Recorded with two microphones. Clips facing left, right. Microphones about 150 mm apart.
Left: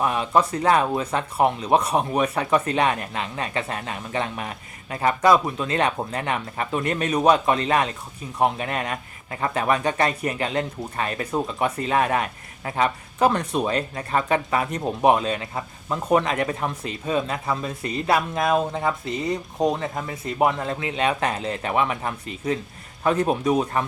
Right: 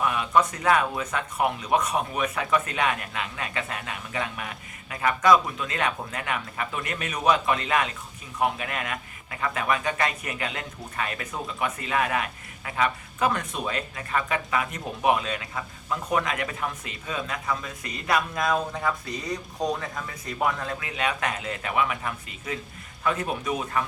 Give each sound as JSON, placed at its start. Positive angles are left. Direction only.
{"t": 0.0, "sound": "speech", "side_deg": 30}